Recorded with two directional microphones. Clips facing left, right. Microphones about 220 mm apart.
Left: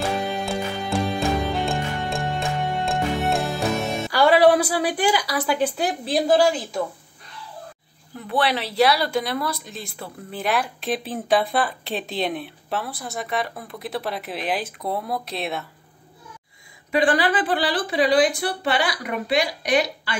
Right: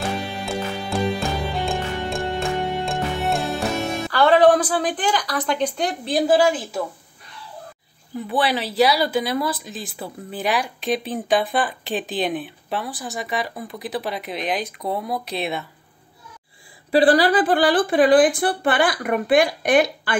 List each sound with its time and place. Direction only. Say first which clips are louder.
0.0 s music: left 2 dB; centre (ahead or behind)
4.1 s a woman's voice: right 1 dB; 10° left (ahead or behind); by 6.8 s 5° right (ahead or behind)
8.2 s speech: right 1 dB; centre (ahead or behind)
16.9 s a woman's voice: right 5 dB; 35° right (ahead or behind); by 20.2 s 50° right (ahead or behind)